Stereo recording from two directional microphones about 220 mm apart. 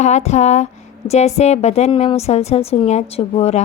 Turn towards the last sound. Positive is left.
turn(degrees=30)  # may be behind; listen again after turning